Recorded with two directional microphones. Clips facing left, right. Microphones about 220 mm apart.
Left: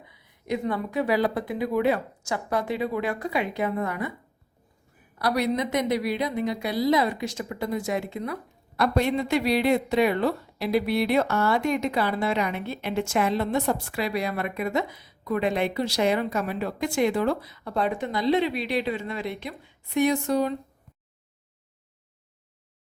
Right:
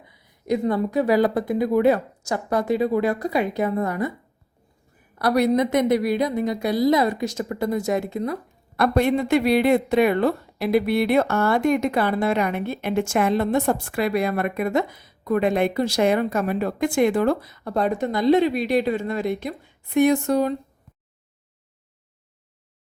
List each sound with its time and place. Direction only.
0.4 s speech: 40° right (ahead or behind)
5.2 s a woman's voice: 50° right (ahead or behind)